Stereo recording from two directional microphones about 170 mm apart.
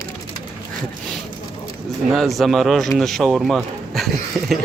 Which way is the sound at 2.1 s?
Centre (ahead or behind).